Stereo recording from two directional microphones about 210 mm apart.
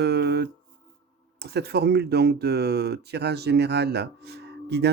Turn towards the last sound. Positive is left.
turn(degrees=-50)  # may be behind; listen again after turning